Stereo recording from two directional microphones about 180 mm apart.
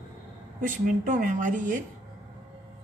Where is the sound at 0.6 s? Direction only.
45° right (ahead or behind).